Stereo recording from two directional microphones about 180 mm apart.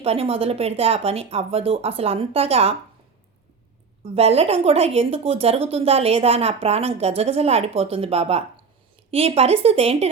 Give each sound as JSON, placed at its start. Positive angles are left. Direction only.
{"t": 0.0, "sound": "speech", "side_deg": -35}
{"t": 4.0, "sound": "speech", "side_deg": -35}